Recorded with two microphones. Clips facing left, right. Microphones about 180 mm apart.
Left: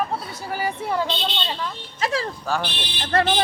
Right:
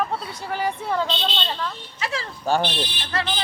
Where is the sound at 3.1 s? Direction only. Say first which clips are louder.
Left 7 dB; 50° left (ahead or behind).